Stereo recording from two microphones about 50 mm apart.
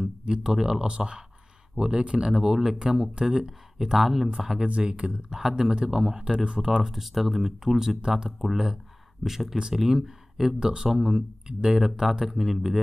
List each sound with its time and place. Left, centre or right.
0.2 s speech: centre
4.6 s speech: right
6.9 s speech: centre